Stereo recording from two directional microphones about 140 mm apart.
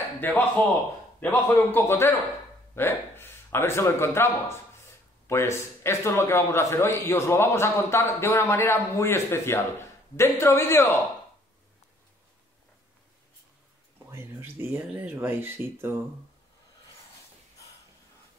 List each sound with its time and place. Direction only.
0.2 s a man's voice: 15° left (ahead or behind)
14.1 s speech: 15° right (ahead or behind)